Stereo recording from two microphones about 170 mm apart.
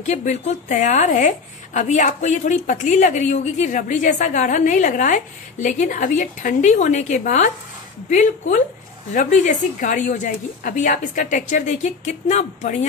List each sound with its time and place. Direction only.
0.0 s a woman's voice: 45° left (ahead or behind)